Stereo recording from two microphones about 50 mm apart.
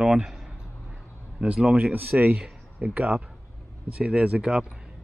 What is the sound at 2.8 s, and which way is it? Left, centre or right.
Speech, right.